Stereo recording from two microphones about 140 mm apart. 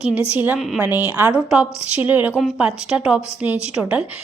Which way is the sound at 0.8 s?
15° right (ahead or behind).